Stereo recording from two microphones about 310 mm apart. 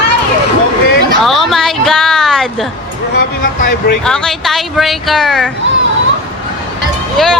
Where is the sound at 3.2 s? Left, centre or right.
Left.